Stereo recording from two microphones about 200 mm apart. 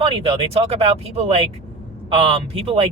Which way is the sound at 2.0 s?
30° right (ahead or behind).